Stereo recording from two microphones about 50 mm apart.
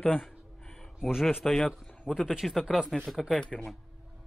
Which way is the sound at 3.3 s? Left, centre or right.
Centre.